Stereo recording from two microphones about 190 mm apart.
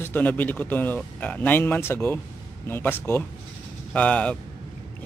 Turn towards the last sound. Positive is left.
turn(degrees=5)  # may be behind; listen again after turning